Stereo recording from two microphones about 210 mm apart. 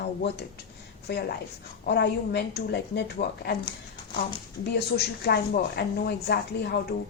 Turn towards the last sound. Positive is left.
turn(degrees=50)  # may be behind; listen again after turning